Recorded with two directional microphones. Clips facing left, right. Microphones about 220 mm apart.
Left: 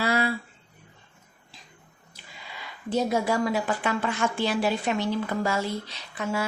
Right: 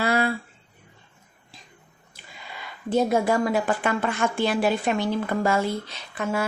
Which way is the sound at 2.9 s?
55° right (ahead or behind).